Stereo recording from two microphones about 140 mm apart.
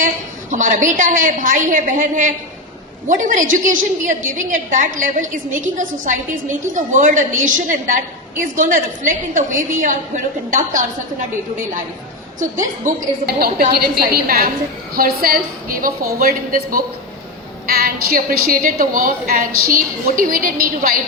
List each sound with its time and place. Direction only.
0.5 s a woman's voice: 65° right (ahead or behind)
12.8 s a woman's voice: 80° right